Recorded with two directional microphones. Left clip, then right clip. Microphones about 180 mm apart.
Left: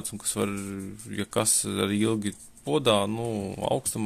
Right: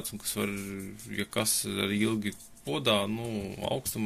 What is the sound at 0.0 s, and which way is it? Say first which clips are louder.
Speech: left 4 dB; 45° left (ahead or behind).